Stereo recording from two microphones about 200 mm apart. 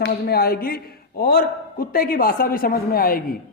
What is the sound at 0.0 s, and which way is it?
A man's voice, 50° left (ahead or behind).